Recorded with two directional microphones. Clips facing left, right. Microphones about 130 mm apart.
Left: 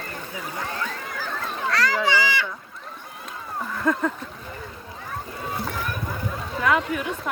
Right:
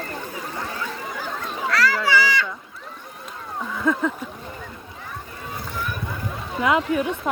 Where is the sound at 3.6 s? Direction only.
Centre (ahead or behind).